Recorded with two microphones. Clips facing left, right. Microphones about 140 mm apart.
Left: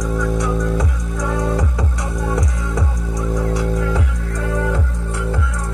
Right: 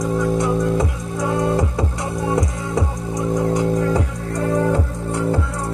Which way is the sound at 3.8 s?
35° right (ahead or behind).